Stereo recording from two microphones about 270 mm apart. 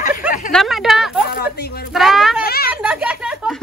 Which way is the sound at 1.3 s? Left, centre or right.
Left.